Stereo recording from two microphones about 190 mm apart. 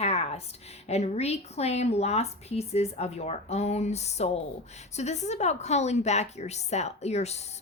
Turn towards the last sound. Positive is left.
turn(degrees=35)  # may be behind; listen again after turning